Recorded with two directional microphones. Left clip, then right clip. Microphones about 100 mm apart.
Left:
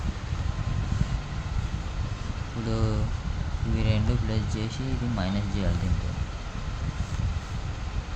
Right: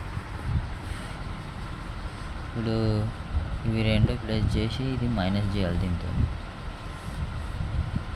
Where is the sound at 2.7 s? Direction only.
10° right (ahead or behind).